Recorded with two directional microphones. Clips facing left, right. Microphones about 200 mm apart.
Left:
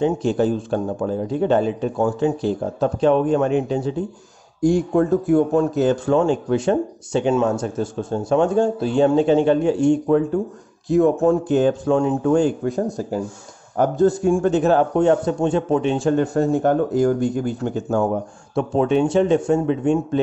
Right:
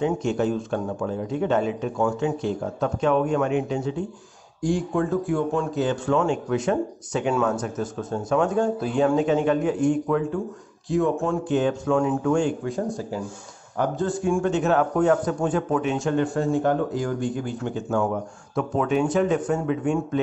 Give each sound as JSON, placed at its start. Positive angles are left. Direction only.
{"t": 0.0, "sound": "a man's voice", "side_deg": 35}